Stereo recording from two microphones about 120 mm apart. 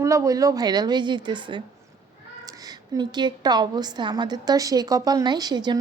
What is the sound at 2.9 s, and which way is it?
A woman's voice, 35° right (ahead or behind).